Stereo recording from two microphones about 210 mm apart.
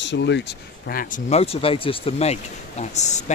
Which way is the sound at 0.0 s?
55° left (ahead or behind).